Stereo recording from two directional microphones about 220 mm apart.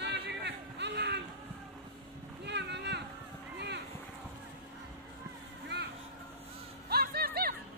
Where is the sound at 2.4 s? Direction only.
50° right (ahead or behind).